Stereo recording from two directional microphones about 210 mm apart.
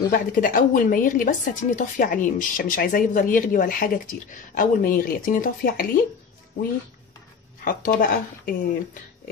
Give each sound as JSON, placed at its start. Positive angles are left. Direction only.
{"t": 0.1, "sound": "a woman's voice", "side_deg": 40}
{"t": 7.6, "sound": "speech", "side_deg": 40}